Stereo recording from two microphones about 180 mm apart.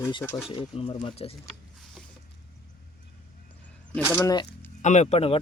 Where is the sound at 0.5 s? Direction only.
30° left (ahead or behind).